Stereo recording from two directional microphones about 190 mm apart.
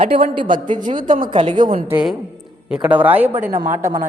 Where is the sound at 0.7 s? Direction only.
45° right (ahead or behind).